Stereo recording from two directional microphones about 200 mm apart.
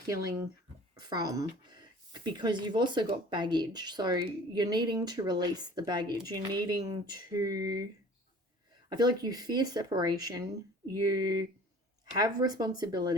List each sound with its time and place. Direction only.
0.1 s speech: 15° right (ahead or behind)
8.9 s speech: 20° right (ahead or behind)